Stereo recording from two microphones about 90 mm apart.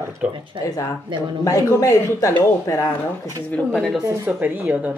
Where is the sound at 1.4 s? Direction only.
35° left (ahead or behind).